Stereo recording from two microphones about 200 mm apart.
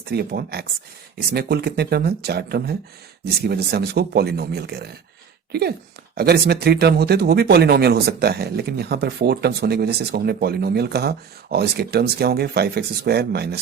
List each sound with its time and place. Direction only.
0.1 s speech: 50° right (ahead or behind)